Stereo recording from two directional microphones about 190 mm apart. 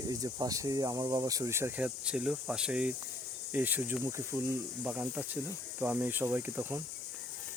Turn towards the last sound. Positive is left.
turn(degrees=-10)  # may be behind; listen again after turning